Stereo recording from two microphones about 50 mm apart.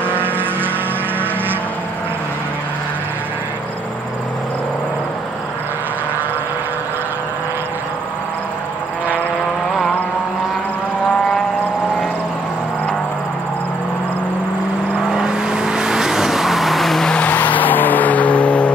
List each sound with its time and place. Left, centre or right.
15.0 s vehicle: centre
17.1 s vehicle: left